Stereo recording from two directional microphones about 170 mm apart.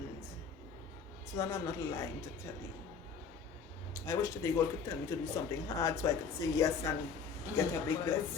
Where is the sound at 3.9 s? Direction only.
15° left (ahead or behind).